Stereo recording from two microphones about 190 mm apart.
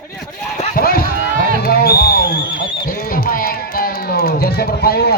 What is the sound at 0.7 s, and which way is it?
Run, 50° left (ahead or behind).